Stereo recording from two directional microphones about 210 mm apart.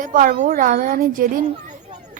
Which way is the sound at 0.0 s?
40° right (ahead or behind).